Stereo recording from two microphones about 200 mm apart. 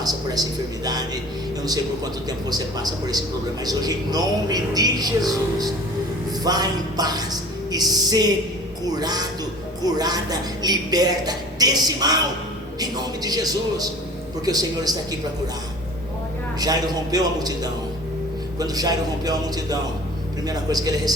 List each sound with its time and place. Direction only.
0.0 s speech: 20° right (ahead or behind)
2.5 s speech: 20° right (ahead or behind)
6.4 s speech: 20° right (ahead or behind)
16.6 s speech: 20° right (ahead or behind)